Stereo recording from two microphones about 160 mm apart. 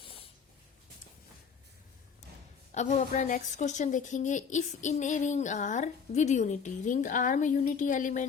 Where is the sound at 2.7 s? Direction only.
45° left (ahead or behind).